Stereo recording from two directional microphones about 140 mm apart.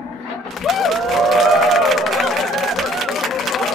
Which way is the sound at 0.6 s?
Centre (ahead or behind).